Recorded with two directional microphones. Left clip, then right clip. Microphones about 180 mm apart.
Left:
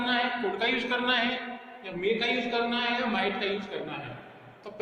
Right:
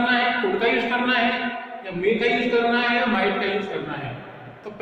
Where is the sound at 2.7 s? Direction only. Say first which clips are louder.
Right 8 dB; 30° left (ahead or behind).